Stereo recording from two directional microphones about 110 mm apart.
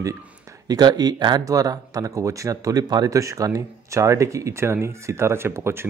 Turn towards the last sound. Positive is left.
turn(degrees=-25)  # may be behind; listen again after turning